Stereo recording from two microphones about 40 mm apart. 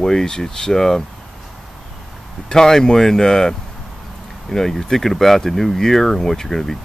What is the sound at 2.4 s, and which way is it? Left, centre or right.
Speech, centre.